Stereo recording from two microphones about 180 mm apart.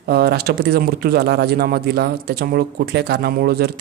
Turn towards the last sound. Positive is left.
turn(degrees=-60)  # may be behind; listen again after turning